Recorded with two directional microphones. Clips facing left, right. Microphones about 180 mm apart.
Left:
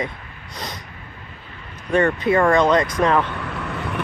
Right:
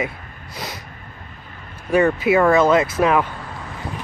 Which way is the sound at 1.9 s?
5° right (ahead or behind).